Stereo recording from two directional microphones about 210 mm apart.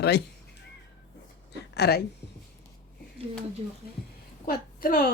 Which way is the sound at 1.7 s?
50° left (ahead or behind).